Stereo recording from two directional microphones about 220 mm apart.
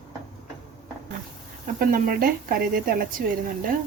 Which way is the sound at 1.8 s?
40° right (ahead or behind).